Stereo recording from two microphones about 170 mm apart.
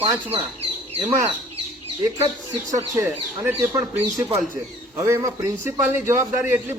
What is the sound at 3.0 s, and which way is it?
A man's voice, 15° right (ahead or behind).